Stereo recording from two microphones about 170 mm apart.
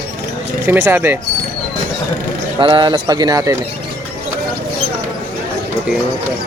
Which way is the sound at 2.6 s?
25° right (ahead or behind).